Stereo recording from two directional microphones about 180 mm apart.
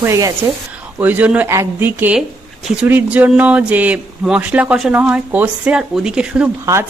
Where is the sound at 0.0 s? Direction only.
15° right (ahead or behind).